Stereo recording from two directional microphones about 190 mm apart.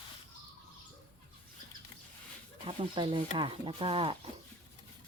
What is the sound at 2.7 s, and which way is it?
Speech, 25° right (ahead or behind).